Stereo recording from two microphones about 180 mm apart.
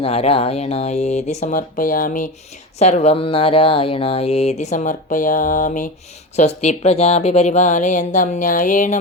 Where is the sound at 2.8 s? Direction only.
35° left (ahead or behind).